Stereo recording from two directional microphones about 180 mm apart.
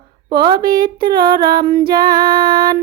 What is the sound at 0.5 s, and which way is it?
Music, 50° right (ahead or behind).